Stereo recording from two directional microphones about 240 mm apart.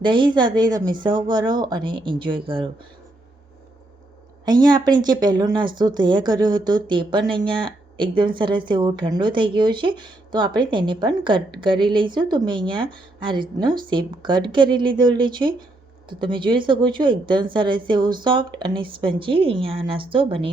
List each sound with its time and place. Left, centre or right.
0.0 s a woman's voice: centre
4.4 s a woman's voice: centre